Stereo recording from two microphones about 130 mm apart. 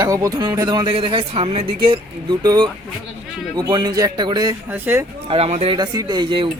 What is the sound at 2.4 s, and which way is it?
Speech, 30° right (ahead or behind).